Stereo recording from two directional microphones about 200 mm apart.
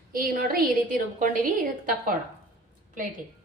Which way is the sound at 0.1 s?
45° right (ahead or behind).